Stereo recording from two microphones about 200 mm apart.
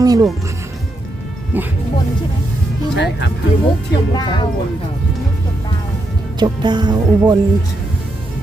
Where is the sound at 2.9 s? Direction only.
60° left (ahead or behind).